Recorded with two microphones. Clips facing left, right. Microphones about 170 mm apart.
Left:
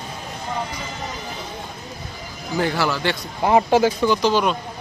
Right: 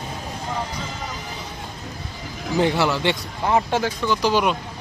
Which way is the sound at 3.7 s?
5° left (ahead or behind).